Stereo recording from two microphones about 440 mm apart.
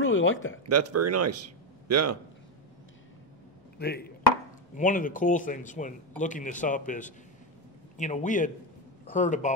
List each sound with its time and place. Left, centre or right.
0.0 s a sound: left
0.7 s speech: right
3.7 s speech: left